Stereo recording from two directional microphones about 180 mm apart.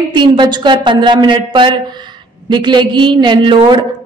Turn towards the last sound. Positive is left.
turn(degrees=-25)  # may be behind; listen again after turning